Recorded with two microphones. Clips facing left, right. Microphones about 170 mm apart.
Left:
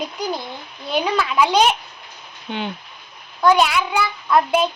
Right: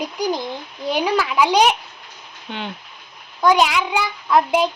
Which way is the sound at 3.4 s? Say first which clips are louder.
Even; 15° right (ahead or behind).